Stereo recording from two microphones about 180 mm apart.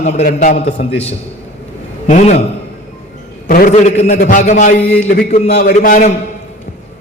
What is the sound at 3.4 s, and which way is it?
A man's voice, 50° left (ahead or behind).